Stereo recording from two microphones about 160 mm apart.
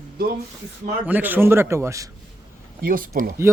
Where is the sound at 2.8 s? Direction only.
65° right (ahead or behind).